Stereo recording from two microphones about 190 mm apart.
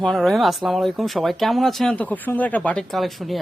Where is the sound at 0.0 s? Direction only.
Centre (ahead or behind).